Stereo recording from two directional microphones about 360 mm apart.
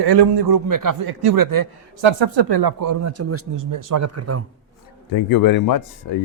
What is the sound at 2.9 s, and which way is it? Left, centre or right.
Speech, right.